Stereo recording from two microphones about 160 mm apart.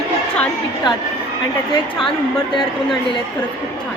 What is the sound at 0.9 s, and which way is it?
Speech, 30° left (ahead or behind).